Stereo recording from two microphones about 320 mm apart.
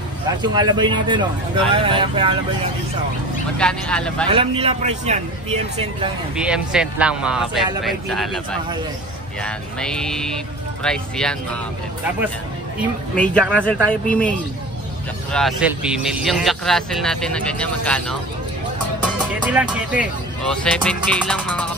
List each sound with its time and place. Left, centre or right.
0.4 s speech: centre
3.5 s speech: centre
4.3 s speech: centre
6.3 s speech: centre
13.1 s speech: centre
15.3 s speech: centre
19.4 s speech: centre